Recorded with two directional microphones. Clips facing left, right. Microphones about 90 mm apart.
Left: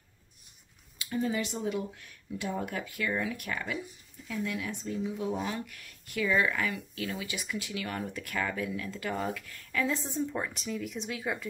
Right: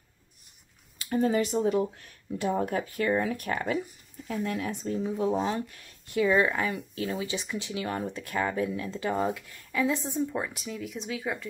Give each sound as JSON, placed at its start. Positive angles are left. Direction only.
{"t": 0.9, "sound": "speech", "side_deg": -45}